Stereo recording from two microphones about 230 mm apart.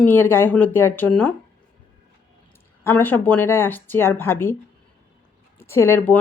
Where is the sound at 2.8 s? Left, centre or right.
Centre.